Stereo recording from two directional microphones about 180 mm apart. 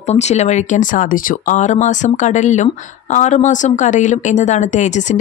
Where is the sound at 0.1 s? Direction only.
40° left (ahead or behind).